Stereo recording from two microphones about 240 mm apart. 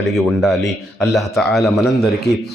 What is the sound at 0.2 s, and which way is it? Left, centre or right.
A man's voice, centre.